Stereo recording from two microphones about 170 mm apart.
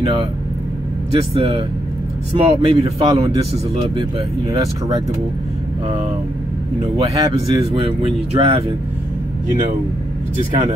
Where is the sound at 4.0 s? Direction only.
30° right (ahead or behind).